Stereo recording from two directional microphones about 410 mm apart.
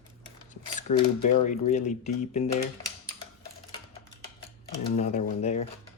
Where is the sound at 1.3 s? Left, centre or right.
Centre.